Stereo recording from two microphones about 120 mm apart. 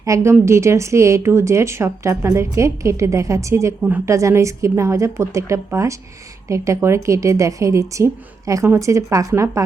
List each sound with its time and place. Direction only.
0.0 s speech: 25° right (ahead or behind)